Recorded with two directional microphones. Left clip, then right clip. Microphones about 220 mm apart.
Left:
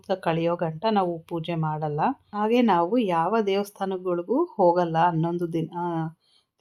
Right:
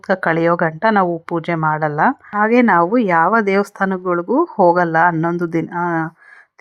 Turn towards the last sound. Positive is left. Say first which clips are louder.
# right 10 dB
turn(degrees=-25)  # may be behind; listen again after turning